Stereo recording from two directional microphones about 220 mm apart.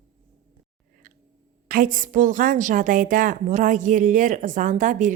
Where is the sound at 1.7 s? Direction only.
40° right (ahead or behind).